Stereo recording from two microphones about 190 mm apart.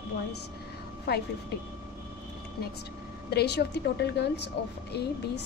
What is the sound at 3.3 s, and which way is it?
Speech, 60° left (ahead or behind).